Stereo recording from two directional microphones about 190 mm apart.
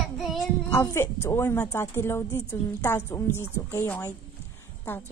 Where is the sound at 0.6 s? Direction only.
15° left (ahead or behind).